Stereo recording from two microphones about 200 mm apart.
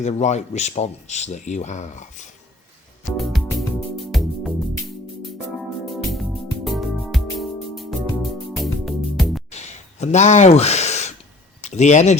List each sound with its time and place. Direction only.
0.0 s speech: 35° left (ahead or behind)
3.1 s music: centre (ahead or behind)
5.8 s music: centre (ahead or behind)
9.5 s a sound: 35° left (ahead or behind)
11.6 s speech: 35° left (ahead or behind)